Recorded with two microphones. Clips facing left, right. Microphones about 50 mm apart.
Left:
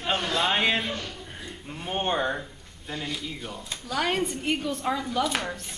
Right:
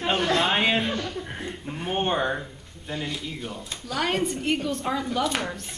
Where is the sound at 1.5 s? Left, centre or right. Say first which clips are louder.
Right 1 dB; centre.